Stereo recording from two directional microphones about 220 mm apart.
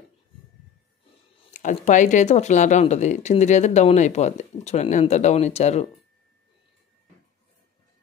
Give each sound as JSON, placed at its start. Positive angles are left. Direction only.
{"t": 1.5, "sound": "speech", "side_deg": 35}